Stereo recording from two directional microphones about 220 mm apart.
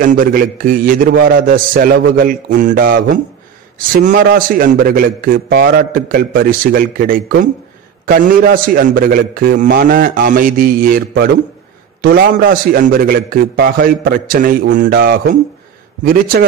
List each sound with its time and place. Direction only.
0.0 s a man's voice: 40° right (ahead or behind)